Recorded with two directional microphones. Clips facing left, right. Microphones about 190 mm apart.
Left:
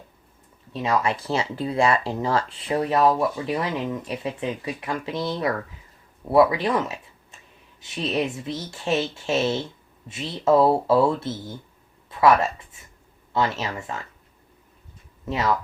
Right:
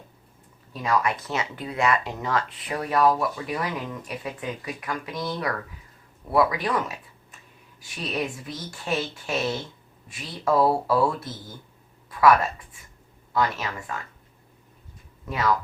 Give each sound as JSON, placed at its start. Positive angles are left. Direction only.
{"t": 0.7, "sound": "speech", "side_deg": 25}
{"t": 15.3, "sound": "speech", "side_deg": 25}